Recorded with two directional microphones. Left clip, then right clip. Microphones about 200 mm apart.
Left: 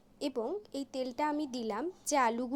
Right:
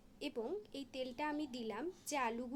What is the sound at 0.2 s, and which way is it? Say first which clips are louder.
A woman's voice: left 7 dB; 30° left (ahead or behind).